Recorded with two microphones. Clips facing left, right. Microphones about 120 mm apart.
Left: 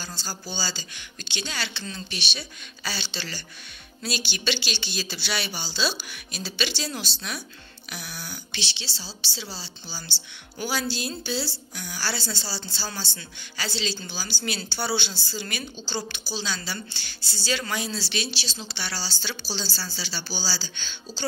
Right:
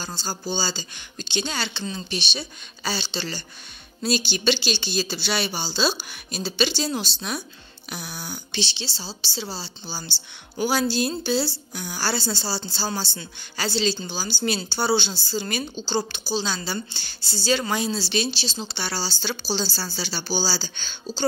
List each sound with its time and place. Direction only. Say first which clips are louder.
0.0 s a woman's voice: right 5 dB; 30° right (ahead or behind)
19.4 s a woman's voice: right 8 dB; 65° right (ahead or behind)
20.2 s a woman's voice: right 7 dB; 35° right (ahead or behind)